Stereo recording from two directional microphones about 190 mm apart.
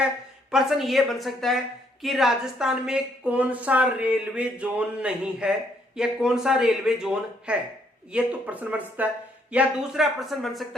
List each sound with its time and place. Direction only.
0.5 s a woman's voice: centre (ahead or behind)